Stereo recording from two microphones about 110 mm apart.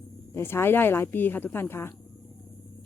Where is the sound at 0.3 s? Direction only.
20° left (ahead or behind).